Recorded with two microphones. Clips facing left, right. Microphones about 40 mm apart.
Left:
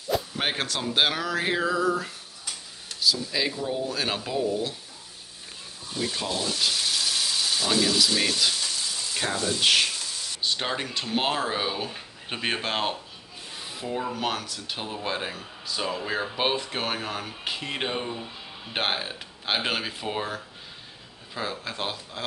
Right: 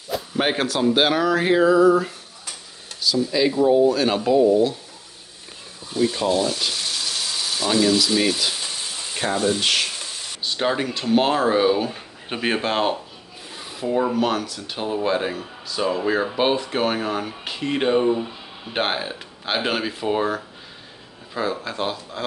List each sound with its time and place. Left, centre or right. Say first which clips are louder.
0.1 s speech: right 4 dB; centre
3.9 s speech: right 10 dB; centre
5.9 s speech: right 9 dB; centre
8.5 s frying: right 1 dB; right
9.6 s speech: even; centre
13.6 s rub: right 8 dB; centre
14.1 s speech: right 7 dB; centre
18.0 s speech: right 13 dB; centre
18.7 s speech: right 4 dB; centre
21.6 s speech: right 6 dB; centre